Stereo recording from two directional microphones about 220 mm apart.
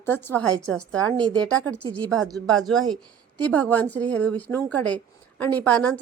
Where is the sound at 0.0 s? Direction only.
10° left (ahead or behind).